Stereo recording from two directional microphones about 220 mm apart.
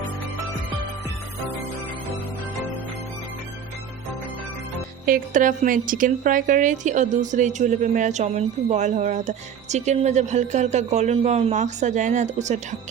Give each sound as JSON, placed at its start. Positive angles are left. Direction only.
{"t": 5.0, "sound": "a woman's voice", "side_deg": -40}